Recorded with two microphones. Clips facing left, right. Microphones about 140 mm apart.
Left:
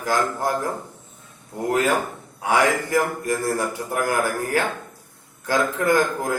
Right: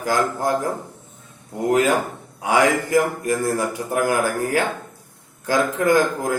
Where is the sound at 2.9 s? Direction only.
15° right (ahead or behind).